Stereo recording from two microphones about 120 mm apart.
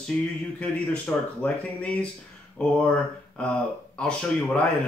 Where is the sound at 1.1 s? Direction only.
15° left (ahead or behind).